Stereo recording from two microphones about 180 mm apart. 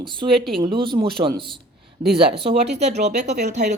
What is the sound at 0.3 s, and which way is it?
Speech, centre (ahead or behind).